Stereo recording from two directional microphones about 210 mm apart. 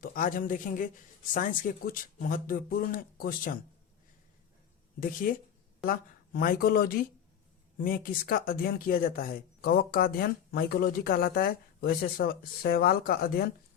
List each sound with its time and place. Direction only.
0.0 s speech: 40° left (ahead or behind)
4.9 s speech: 40° left (ahead or behind)